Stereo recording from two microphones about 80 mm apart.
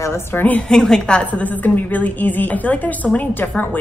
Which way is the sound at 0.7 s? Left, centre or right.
Centre.